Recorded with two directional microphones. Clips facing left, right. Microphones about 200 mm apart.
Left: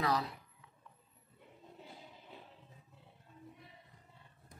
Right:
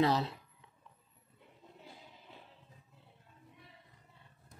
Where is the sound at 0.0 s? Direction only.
25° right (ahead or behind).